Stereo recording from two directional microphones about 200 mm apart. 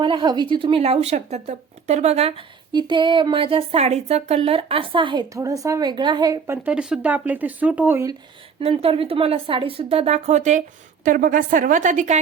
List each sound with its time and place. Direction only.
0.0 s speech: 25° right (ahead or behind)
6.7 s speech: 5° right (ahead or behind)
8.6 s a woman's voice: 30° right (ahead or behind)